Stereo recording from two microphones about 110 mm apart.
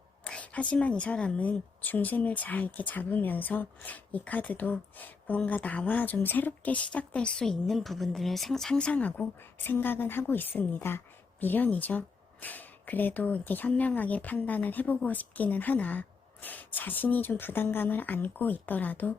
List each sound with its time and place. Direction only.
0.3 s a woman's voice: 10° left (ahead or behind)